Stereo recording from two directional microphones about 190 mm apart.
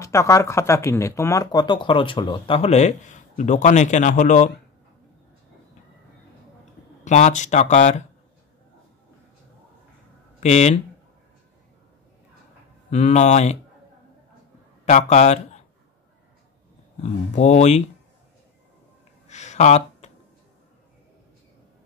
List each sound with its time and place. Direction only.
0.0 s speech: 15° left (ahead or behind); by 4.5 s 40° left (ahead or behind)
7.1 s speech: 40° left (ahead or behind)
10.4 s speech: 35° left (ahead or behind)
12.9 s speech: 40° left (ahead or behind)
14.9 s a man's voice: 40° left (ahead or behind)
17.0 s speech: 35° left (ahead or behind)
19.2 s a sound: 35° left (ahead or behind)